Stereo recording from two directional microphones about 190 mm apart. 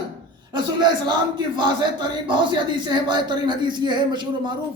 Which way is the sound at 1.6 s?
25° right (ahead or behind).